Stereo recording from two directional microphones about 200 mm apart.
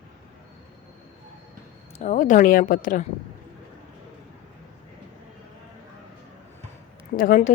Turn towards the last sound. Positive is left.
turn(degrees=45)  # may be behind; listen again after turning